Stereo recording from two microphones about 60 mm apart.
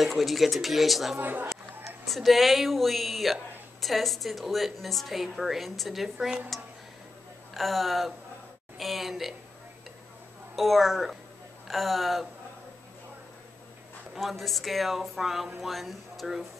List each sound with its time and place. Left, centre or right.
0.0 s a woman's voice: centre
1.1 s a woman's voice: right
1.9 s a woman's voice: centre
7.5 s a woman's voice: centre
10.5 s a woman's voice: centre
14.1 s a woman's voice: centre